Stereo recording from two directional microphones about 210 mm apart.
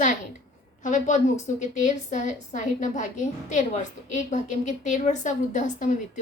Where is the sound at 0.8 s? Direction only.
35° left (ahead or behind).